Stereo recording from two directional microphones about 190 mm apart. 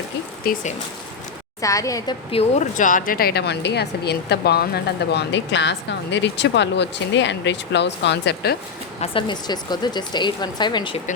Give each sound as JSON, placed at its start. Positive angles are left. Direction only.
{"t": 0.4, "sound": "speech", "side_deg": 50}
{"t": 1.6, "sound": "a woman's voice", "side_deg": 15}
{"t": 2.3, "sound": "a woman's voice", "side_deg": 35}
{"t": 9.0, "sound": "speech", "side_deg": 25}